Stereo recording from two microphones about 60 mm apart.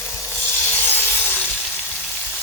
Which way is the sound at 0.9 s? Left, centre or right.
Left.